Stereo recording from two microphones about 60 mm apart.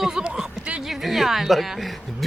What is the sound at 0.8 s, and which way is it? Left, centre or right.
A woman's voice, centre.